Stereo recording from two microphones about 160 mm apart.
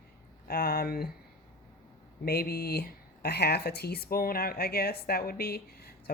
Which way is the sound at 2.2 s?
75° left (ahead or behind).